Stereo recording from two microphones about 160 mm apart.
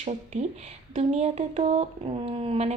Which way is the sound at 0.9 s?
40° right (ahead or behind).